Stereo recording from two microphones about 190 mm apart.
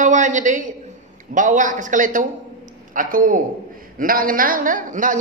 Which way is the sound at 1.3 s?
40° right (ahead or behind).